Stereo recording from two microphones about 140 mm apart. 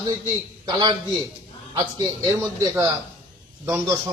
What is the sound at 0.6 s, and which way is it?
A man's voice, 30° right (ahead or behind).